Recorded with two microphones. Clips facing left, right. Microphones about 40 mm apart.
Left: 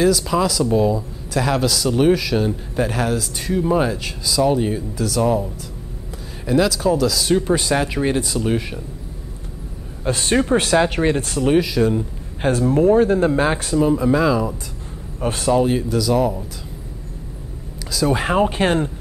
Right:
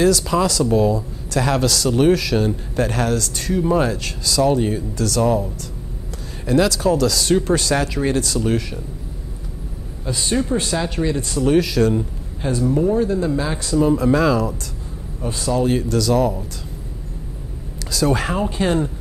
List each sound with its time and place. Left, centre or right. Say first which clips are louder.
0.0 s speech: even; centre
10.0 s speech: left 3 dB; left
11.6 s speech: right 1 dB; centre
12.4 s speech: left 2 dB; left
13.7 s speech: right 2 dB; centre
15.1 s speech: left 4 dB; left
15.6 s speech: even; centre
17.9 s speech: even; centre
18.3 s speech: left 3 dB; left